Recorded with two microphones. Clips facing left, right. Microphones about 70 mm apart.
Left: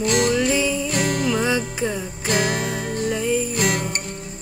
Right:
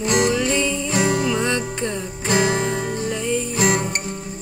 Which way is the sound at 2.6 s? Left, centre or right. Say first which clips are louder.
Right 2 dB; centre.